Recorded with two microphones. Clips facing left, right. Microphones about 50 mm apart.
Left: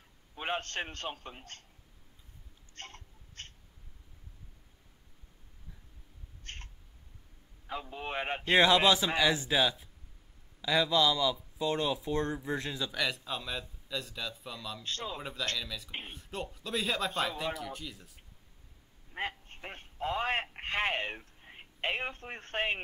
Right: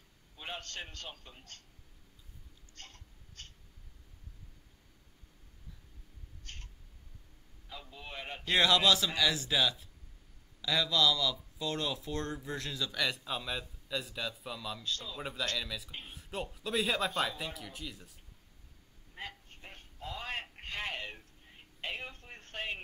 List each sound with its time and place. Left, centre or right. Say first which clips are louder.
0.4 s a man's voice: left 8 dB; left
2.7 s a sound: left 6 dB; left
6.4 s cat: left 5 dB; left
7.6 s a man's voice: left 9 dB; left
8.5 s speech: left 3 dB; left
12.9 s speech: right 1 dB; centre
14.8 s a man's voice: left 2 dB; left
15.5 s speech: even; centre
19.1 s telephone: left 8 dB; left